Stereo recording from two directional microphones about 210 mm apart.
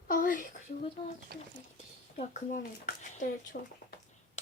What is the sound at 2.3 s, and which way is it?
A child's voice, 35° left (ahead or behind).